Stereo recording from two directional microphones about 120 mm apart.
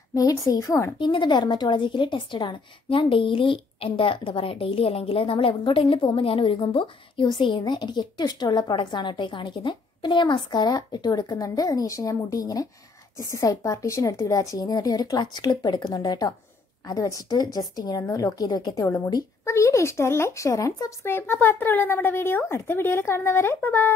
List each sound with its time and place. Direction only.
0.1 s speech: 30° left (ahead or behind)
0.9 s a woman's voice: 40° left (ahead or behind)
19.4 s speech: 25° left (ahead or behind)